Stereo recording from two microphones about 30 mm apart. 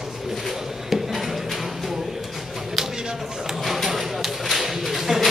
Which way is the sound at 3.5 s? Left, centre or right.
Centre.